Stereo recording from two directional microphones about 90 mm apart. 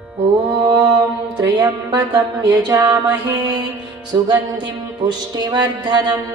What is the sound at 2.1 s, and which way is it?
Music, 45° right (ahead or behind).